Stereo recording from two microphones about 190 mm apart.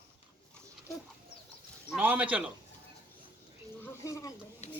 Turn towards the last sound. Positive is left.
turn(degrees=15)  # may be behind; listen again after turning